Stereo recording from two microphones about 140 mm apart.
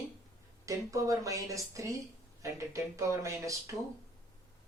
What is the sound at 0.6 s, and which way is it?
Speech, 25° right (ahead or behind).